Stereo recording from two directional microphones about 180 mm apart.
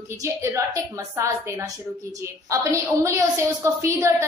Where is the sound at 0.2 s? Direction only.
15° right (ahead or behind).